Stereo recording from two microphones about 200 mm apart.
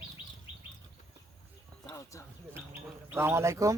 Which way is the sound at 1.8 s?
15° left (ahead or behind).